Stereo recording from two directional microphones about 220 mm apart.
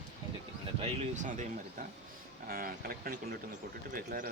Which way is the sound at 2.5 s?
40° right (ahead or behind).